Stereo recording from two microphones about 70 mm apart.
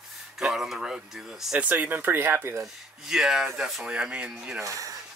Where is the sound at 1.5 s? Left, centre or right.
Right.